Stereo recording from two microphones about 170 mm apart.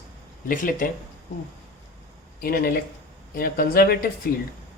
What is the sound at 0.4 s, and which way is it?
Speech, 55° left (ahead or behind).